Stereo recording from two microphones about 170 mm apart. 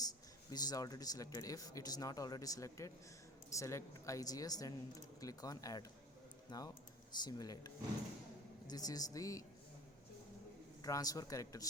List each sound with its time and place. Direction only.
0.0 s speech: 20° left (ahead or behind)
10.8 s speech: 20° left (ahead or behind)